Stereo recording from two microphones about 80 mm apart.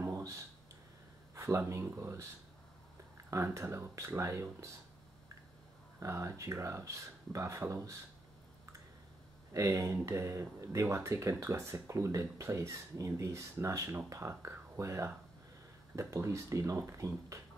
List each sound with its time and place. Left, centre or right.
0.0 s a sound: right
1.7 s speech: right
3.5 s speech: right
5.9 s speech: right
9.5 s speech: right